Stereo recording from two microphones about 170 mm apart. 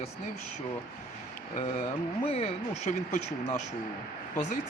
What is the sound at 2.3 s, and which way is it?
Speech, 40° left (ahead or behind).